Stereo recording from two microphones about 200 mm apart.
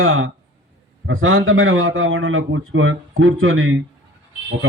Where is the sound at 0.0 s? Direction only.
90° right.